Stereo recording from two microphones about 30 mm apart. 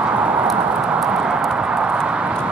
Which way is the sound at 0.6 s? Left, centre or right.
Right.